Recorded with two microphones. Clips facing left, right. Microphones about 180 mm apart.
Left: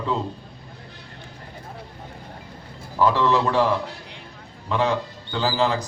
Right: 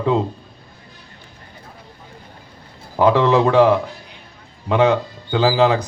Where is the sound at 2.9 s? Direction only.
60° right (ahead or behind).